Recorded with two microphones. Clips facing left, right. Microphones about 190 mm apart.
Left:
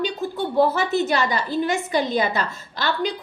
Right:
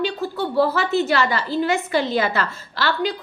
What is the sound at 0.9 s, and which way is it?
Speech, 45° left (ahead or behind).